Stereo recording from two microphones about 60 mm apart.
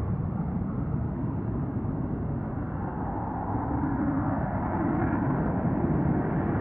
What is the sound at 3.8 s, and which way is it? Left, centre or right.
Vehicle, centre.